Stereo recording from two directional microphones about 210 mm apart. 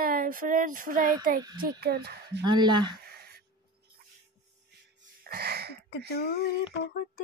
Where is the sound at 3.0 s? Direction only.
45° right (ahead or behind).